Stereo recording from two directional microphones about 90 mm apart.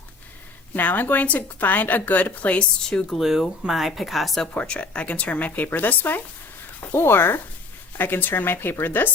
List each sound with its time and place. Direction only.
0.8 s a woman's voice: 20° left (ahead or behind)
3.2 s a woman's voice: 5° right (ahead or behind)
4.5 s a woman's voice: 15° left (ahead or behind)